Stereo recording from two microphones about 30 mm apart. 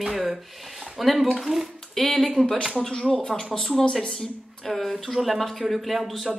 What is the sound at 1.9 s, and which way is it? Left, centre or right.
Speech, centre.